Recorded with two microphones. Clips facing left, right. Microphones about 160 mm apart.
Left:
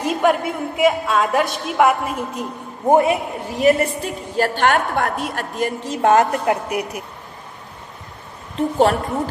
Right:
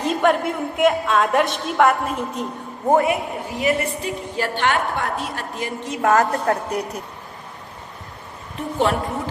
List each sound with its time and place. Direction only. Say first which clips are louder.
0.0 s a woman's voice: left 1 dB; 5° left (ahead or behind)
2.8 s a woman's voice: left 3 dB; 20° left (ahead or behind)
3.6 s a woman's voice: left 6 dB; 45° left (ahead or behind)
5.8 s a woman's voice: left 2 dB; 30° left (ahead or behind)
6.4 s a woman's voice: left 1 dB; 10° left (ahead or behind)
8.5 s a woman's voice: left 5 dB; 40° left (ahead or behind)